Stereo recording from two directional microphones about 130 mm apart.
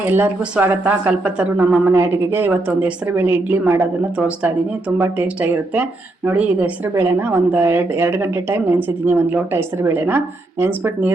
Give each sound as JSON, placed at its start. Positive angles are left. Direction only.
{"t": 0.1, "sound": "a woman's voice", "side_deg": -15}
{"t": 4.9, "sound": "a woman's voice", "side_deg": -15}